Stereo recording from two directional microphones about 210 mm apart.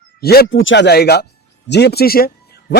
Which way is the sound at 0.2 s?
50° left (ahead or behind).